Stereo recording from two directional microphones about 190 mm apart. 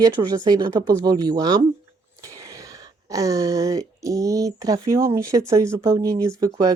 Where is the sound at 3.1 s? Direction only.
15° right (ahead or behind).